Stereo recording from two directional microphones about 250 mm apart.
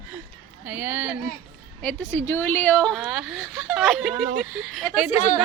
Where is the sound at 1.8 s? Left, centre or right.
Centre.